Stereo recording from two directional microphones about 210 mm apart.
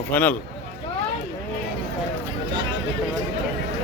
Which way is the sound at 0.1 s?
10° left (ahead or behind).